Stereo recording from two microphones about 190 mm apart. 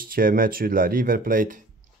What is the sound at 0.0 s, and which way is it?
Speech, 50° right (ahead or behind).